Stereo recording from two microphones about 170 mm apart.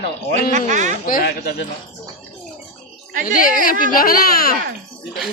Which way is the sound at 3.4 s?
55° left (ahead or behind).